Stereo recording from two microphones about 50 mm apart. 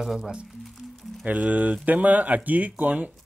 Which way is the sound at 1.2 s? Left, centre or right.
Right.